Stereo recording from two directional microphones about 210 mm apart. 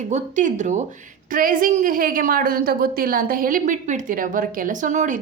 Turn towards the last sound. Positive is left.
turn(degrees=-35)  # may be behind; listen again after turning